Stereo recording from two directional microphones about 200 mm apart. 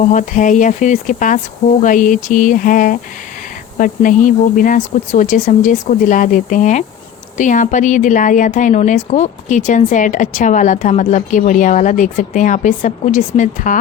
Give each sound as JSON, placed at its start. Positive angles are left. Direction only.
{"t": 0.1, "sound": "a woman's voice", "side_deg": 40}